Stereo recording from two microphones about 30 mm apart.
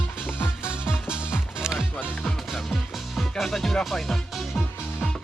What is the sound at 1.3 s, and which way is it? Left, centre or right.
Music, right.